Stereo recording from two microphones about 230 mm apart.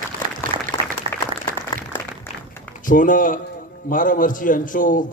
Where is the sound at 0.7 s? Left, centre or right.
Centre.